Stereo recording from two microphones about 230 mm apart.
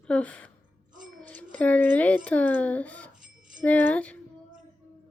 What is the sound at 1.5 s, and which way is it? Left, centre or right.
A child's voice, centre.